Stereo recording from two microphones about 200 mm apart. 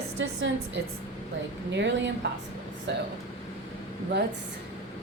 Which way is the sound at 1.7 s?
60° right (ahead or behind).